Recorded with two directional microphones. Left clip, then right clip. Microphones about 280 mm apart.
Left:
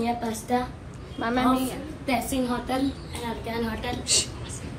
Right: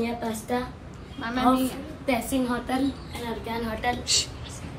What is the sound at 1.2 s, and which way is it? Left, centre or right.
A woman's voice, centre.